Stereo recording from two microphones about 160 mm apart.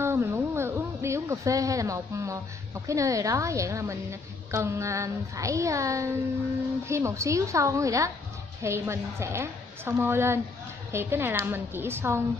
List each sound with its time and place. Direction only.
0.0 s a woman's voice: 15° right (ahead or behind)